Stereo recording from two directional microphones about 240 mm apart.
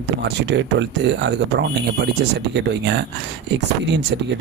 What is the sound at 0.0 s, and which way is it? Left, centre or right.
Speech, right.